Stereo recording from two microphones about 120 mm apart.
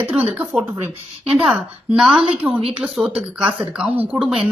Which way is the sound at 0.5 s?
5° right (ahead or behind).